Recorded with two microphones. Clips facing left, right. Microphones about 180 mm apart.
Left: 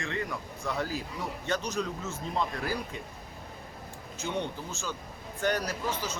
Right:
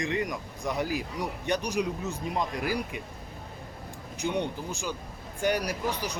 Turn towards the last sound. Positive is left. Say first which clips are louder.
# right 2 dB
turn(degrees=-15)  # may be behind; listen again after turning